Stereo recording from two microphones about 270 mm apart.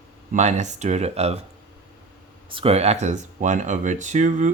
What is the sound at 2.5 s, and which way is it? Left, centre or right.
Speech, right.